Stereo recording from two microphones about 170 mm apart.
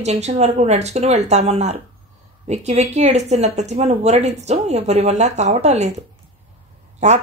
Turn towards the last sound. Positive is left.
turn(degrees=-40)  # may be behind; listen again after turning